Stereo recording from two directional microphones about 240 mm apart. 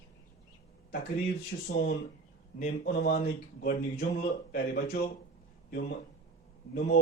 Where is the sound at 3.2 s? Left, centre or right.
Left.